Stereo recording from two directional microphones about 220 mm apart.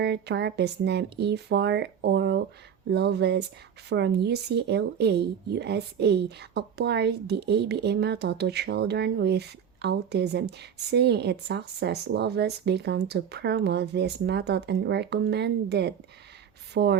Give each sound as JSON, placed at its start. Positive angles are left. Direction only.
{"t": 0.0, "sound": "speech", "side_deg": -50}